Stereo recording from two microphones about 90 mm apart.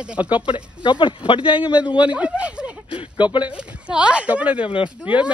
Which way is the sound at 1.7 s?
15° right (ahead or behind).